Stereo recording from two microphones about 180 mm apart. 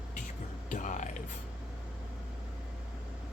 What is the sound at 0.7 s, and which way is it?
Speech, 45° left (ahead or behind).